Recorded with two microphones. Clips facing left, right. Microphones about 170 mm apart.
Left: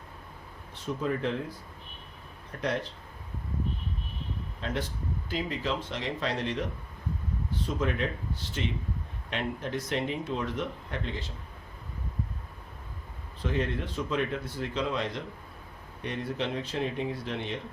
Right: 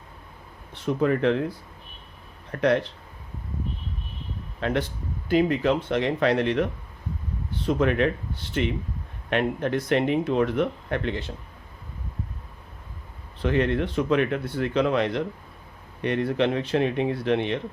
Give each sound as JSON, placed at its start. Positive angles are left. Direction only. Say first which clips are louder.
{"t": 0.7, "sound": "speech", "louder": "right 8 dB", "side_deg": -70}
{"t": 2.5, "sound": "speech", "louder": "right 9 dB", "side_deg": -70}
{"t": 4.6, "sound": "speech", "louder": "right 7 dB", "side_deg": -65}
{"t": 7.7, "sound": "speech", "louder": "right 9 dB", "side_deg": -70}
{"t": 13.4, "sound": "speech", "louder": "right 8 dB", "side_deg": -70}